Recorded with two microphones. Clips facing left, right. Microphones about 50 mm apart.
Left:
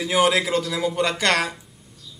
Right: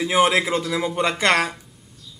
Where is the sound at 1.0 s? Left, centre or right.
Right.